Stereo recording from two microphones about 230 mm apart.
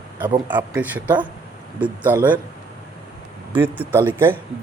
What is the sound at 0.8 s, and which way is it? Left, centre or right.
Speech, centre.